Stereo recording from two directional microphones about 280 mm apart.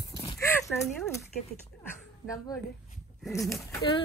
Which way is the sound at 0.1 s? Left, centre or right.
Centre.